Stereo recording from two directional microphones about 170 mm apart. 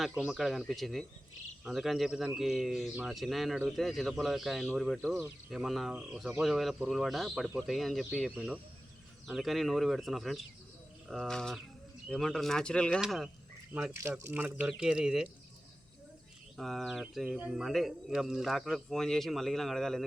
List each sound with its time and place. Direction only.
0.1 s speech: 5° right (ahead or behind)
13.9 s speech: 15° right (ahead or behind)
16.6 s speech: centre (ahead or behind)